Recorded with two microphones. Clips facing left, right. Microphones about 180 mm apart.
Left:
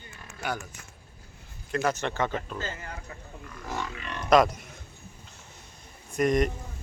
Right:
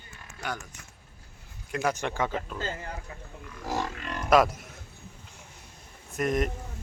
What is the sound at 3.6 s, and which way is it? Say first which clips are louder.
Grunt: right 3 dB; 40° right (ahead or behind).